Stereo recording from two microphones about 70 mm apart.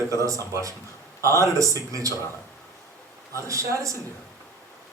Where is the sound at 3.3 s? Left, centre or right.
Right.